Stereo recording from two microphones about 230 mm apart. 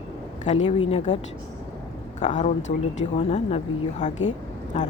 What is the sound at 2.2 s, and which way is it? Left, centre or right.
Speech, left.